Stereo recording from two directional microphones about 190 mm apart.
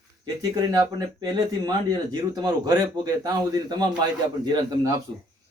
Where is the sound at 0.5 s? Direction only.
20° right (ahead or behind).